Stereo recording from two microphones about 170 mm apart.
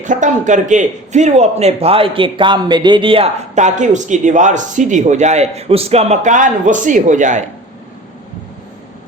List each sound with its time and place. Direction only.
0.0 s a man's voice: 45° right (ahead or behind); by 3.2 s 30° right (ahead or behind)
3.5 s a man's voice: 45° right (ahead or behind)